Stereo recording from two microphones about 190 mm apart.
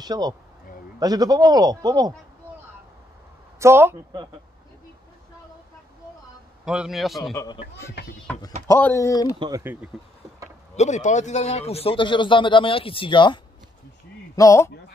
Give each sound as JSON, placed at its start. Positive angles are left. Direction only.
{"t": 0.0, "sound": "speech", "side_deg": -20}
{"t": 3.5, "sound": "speech", "side_deg": -15}
{"t": 6.6, "sound": "a man's voice", "side_deg": -5}
{"t": 8.0, "sound": "speech", "side_deg": 60}
{"t": 8.3, "sound": "a sound", "side_deg": 20}
{"t": 8.6, "sound": "speech", "side_deg": 10}
{"t": 9.4, "sound": "speech", "side_deg": -15}
{"t": 10.8, "sound": "a man's voice", "side_deg": 40}